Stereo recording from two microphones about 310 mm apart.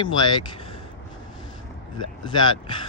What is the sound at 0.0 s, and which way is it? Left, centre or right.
Speech, centre.